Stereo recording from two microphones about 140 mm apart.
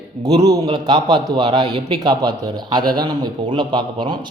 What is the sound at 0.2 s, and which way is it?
A man's voice, 30° right (ahead or behind).